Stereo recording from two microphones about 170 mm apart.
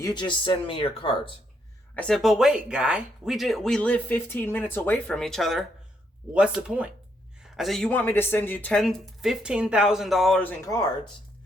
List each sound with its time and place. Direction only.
0.0 s speech: 25° left (ahead or behind)
2.0 s speech: 5° left (ahead or behind)